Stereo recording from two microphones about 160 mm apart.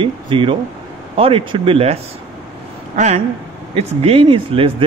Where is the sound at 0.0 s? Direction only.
35° right (ahead or behind).